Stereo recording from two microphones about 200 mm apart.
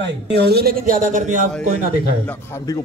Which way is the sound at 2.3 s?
10° left (ahead or behind).